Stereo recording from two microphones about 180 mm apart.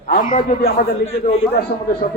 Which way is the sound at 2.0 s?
60° left (ahead or behind).